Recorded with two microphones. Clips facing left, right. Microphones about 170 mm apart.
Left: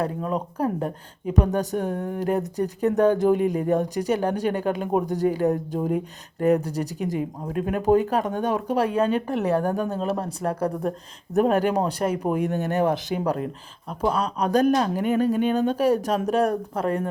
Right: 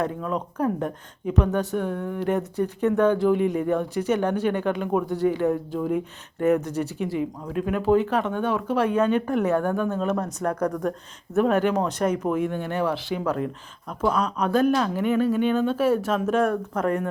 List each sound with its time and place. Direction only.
0.0 s speech: 35° left (ahead or behind)